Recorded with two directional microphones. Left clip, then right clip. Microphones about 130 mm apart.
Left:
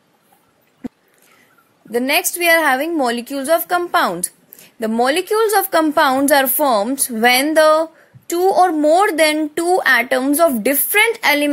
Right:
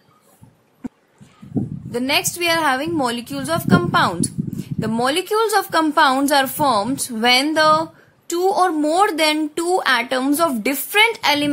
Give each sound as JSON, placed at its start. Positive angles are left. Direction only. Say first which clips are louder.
{"t": 1.9, "sound": "a woman's voice", "louder": "left 3 dB", "side_deg": 30}